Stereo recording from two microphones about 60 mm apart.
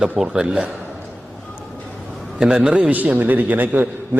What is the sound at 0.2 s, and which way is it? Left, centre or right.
Speech, centre.